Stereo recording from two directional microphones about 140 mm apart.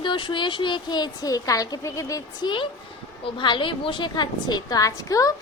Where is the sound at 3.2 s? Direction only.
35° left (ahead or behind).